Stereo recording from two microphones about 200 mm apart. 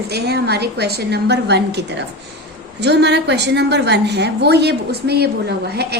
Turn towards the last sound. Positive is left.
turn(degrees=-55)  # may be behind; listen again after turning